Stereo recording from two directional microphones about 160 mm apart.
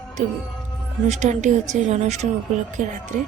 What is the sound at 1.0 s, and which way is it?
Speech, 45° right (ahead or behind).